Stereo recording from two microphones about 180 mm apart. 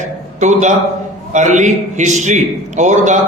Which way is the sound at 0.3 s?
40° right (ahead or behind).